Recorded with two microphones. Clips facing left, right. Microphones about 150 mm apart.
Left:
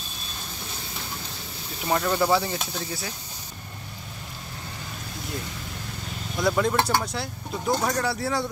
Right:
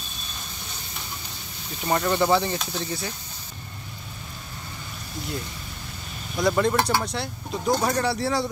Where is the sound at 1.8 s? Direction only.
Centre (ahead or behind).